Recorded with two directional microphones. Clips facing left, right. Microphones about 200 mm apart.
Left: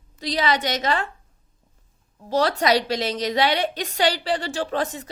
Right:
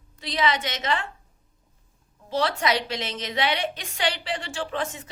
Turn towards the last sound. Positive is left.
turn(degrees=35)  # may be behind; listen again after turning